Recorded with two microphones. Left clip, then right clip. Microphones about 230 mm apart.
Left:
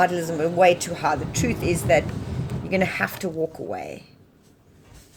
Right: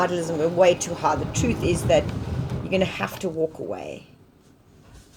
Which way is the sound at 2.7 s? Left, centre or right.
Left.